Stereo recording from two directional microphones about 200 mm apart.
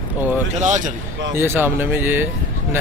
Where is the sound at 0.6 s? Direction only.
35° right (ahead or behind).